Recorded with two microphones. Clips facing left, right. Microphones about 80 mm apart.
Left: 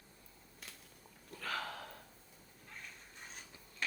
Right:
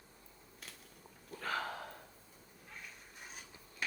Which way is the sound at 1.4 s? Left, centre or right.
Right.